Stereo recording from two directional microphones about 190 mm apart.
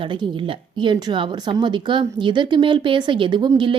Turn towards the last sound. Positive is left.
turn(degrees=-25)  # may be behind; listen again after turning